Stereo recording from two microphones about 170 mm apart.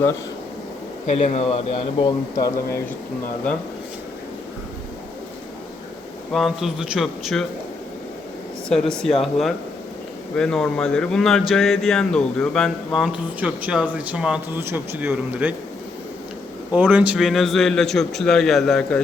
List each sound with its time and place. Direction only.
1.0 s speech: 40° left (ahead or behind); by 2.5 s 25° left (ahead or behind)
6.3 s speech: centre (ahead or behind)
8.7 s speech: 5° left (ahead or behind)
16.7 s speech: 10° right (ahead or behind)